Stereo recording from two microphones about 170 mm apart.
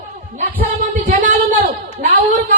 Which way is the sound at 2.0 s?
50° right (ahead or behind).